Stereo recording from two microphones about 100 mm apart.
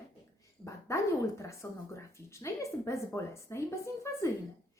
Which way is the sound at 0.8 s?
30° left (ahead or behind).